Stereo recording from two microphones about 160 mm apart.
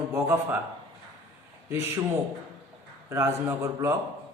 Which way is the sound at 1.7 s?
15° right (ahead or behind).